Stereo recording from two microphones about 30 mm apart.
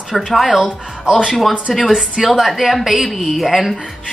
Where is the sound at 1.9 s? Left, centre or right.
Centre.